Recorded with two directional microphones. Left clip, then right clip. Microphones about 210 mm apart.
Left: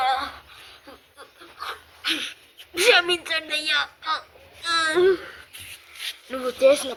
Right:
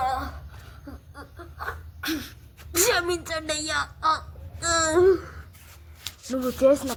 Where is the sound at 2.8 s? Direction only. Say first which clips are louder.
Left 6 dB; 45° right (ahead or behind).